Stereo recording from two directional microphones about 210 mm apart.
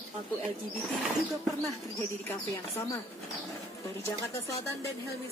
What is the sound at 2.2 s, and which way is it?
Speech, 10° left (ahead or behind).